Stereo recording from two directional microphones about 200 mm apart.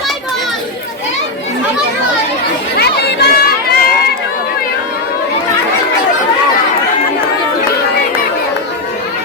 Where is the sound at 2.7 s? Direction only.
55° left (ahead or behind).